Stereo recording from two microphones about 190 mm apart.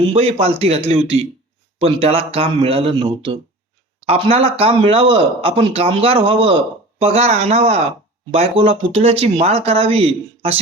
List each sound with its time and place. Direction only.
0.1 s speech: 35° right (ahead or behind)